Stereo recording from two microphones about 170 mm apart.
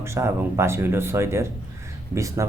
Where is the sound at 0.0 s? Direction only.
15° right (ahead or behind).